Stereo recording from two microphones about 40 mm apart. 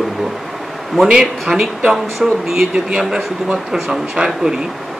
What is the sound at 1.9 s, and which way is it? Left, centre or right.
Speech, centre.